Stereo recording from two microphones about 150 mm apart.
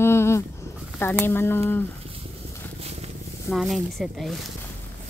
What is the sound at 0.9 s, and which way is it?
Speech, 15° left (ahead or behind).